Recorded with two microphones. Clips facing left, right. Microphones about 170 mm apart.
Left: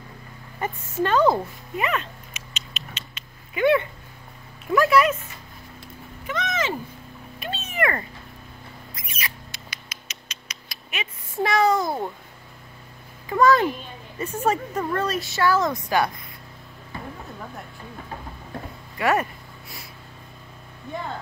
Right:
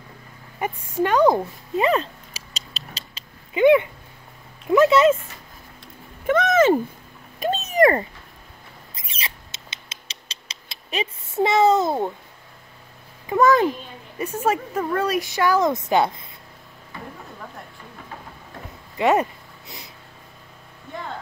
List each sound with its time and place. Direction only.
0.6 s speech: 10° right (ahead or behind)
1.8 s cat: 30° right (ahead or behind)
3.5 s a child's voice: 15° right (ahead or behind)
6.2 s a sound: 50° right (ahead or behind)
7.3 s cat: 40° right (ahead or behind)
8.9 s rodents: 30° right (ahead or behind)
11.3 s a child's voice: 20° right (ahead or behind)
13.3 s a child's voice: 20° right (ahead or behind)
14.4 s speech: 10° right (ahead or behind); by 16.3 s 25° right (ahead or behind)
18.9 s a child's voice: 20° right (ahead or behind)